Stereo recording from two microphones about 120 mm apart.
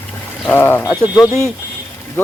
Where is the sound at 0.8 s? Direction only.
30° left (ahead or behind).